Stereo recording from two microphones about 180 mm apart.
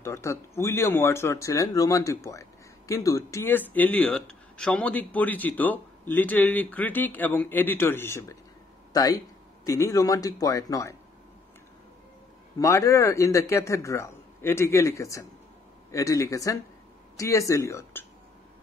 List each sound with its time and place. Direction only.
0.0 s speech: 15° left (ahead or behind)
12.5 s speech: 15° left (ahead or behind)